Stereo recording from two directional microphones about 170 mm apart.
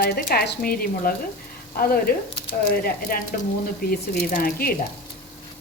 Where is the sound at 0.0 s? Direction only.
65° left (ahead or behind).